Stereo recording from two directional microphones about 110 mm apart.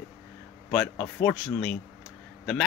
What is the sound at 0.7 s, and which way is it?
A man's voice, 10° left (ahead or behind).